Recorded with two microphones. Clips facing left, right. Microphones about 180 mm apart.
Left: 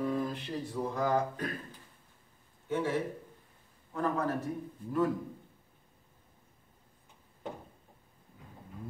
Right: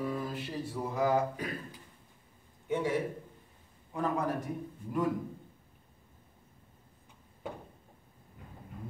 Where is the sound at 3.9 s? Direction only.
15° right (ahead or behind).